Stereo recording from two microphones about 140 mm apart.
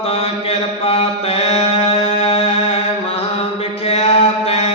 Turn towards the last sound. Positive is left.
turn(degrees=45)  # may be behind; listen again after turning